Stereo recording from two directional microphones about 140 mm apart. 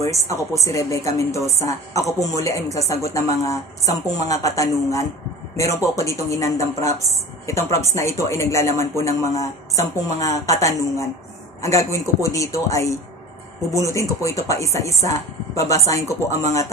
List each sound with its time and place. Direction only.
0.0 s speech: 20° left (ahead or behind)